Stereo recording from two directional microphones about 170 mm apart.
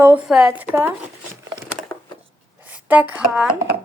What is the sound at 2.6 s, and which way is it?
Speech, 10° right (ahead or behind).